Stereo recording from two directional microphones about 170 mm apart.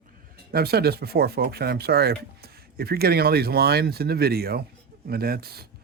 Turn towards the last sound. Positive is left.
turn(degrees=-65)  # may be behind; listen again after turning